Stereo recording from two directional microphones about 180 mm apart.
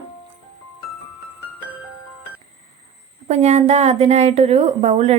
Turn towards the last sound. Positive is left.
turn(degrees=-35)  # may be behind; listen again after turning